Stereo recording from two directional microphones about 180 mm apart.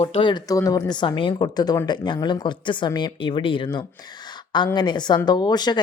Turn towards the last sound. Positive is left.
turn(degrees=25)  # may be behind; listen again after turning